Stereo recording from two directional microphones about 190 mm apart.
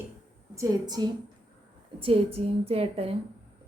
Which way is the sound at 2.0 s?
30° right (ahead or behind).